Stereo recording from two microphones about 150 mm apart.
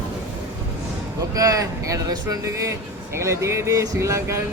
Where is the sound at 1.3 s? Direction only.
20° right (ahead or behind).